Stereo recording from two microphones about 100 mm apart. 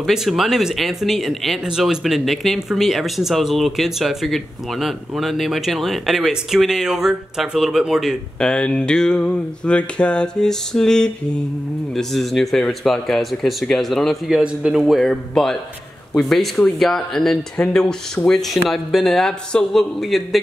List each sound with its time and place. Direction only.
0.0 s speech: centre (ahead or behind)
8.4 s a sound: 10° left (ahead or behind)
11.9 s speech: centre (ahead or behind)